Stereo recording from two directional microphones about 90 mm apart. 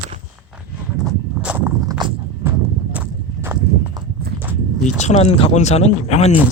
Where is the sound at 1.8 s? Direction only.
40° right (ahead or behind).